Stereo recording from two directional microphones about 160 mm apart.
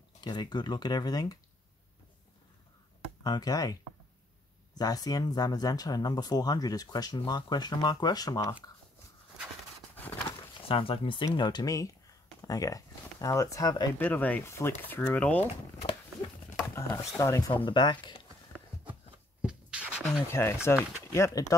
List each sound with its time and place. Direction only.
0.2 s speech: 25° left (ahead or behind)
3.3 s speech: 25° left (ahead or behind)
4.7 s speech: 25° left (ahead or behind)
9.9 s a sound: 10° left (ahead or behind)
10.7 s speech: 35° left (ahead or behind)
13.9 s speech: 10° left (ahead or behind)
16.5 s a sound: 20° left (ahead or behind)
17.2 s speech: 20° left (ahead or behind)
19.4 s beatboxing: 5° right (ahead or behind)
20.2 s speech: 15° left (ahead or behind)